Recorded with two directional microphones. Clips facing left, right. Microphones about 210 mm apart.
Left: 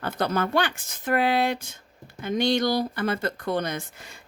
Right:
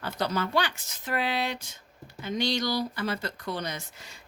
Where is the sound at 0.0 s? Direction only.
55° left (ahead or behind).